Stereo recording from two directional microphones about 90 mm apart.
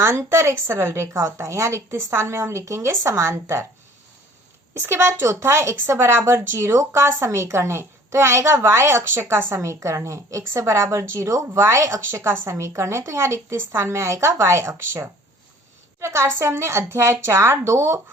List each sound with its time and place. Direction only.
0.0 s speech: 30° right (ahead or behind)
4.8 s speech: 30° right (ahead or behind)